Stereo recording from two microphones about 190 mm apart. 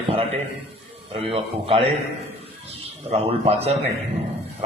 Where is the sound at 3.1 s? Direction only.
30° right (ahead or behind).